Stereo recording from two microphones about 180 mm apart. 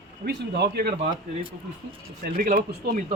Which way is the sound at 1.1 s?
30° right (ahead or behind).